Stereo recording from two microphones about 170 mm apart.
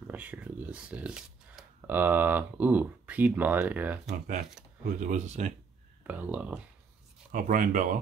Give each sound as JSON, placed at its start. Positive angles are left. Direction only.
{"t": 0.0, "sound": "speech", "side_deg": -10}
{"t": 4.1, "sound": "speech", "side_deg": -45}
{"t": 6.0, "sound": "speech", "side_deg": -10}
{"t": 7.3, "sound": "speech", "side_deg": -55}